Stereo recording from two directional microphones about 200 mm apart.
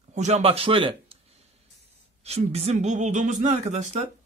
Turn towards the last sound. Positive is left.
turn(degrees=-35)  # may be behind; listen again after turning